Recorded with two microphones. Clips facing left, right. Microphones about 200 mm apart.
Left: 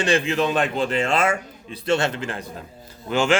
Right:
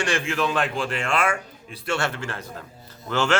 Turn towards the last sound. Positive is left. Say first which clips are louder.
# left 3 dB
turn(degrees=15)  # may be behind; listen again after turning